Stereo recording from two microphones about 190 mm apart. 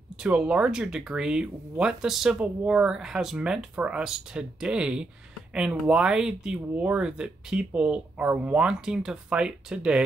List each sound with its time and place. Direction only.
0.2 s speech: 5° right (ahead or behind)